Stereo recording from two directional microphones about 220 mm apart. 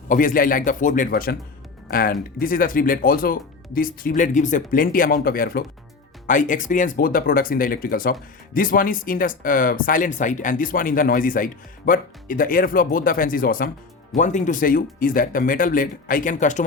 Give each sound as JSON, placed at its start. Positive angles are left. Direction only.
{"t": 0.1, "sound": "speech", "side_deg": 40}